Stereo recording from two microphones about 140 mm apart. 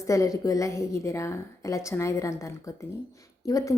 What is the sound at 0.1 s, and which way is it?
A woman's voice, 25° left (ahead or behind).